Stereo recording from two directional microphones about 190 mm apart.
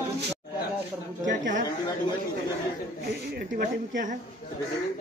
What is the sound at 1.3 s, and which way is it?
Speech, 40° right (ahead or behind).